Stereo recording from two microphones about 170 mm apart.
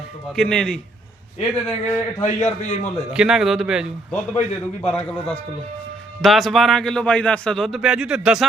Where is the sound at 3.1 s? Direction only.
5° right (ahead or behind).